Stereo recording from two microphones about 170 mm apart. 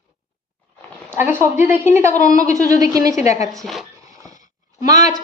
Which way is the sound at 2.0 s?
45° left (ahead or behind).